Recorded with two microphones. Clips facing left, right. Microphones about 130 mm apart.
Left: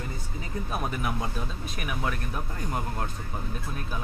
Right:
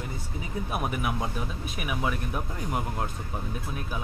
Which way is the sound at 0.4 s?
10° right (ahead or behind).